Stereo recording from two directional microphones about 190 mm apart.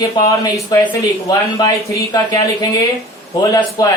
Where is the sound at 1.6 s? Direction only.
15° left (ahead or behind).